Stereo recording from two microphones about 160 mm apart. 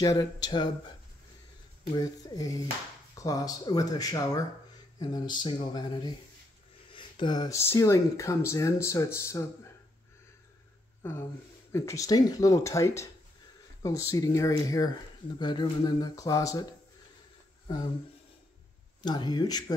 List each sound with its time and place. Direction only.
0.0 s speech: 25° left (ahead or behind)
2.0 s speech: 25° left (ahead or behind)
11.0 s speech: 15° left (ahead or behind)
19.0 s speech: 25° left (ahead or behind)